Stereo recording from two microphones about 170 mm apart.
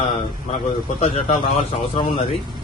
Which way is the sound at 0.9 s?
40° left (ahead or behind).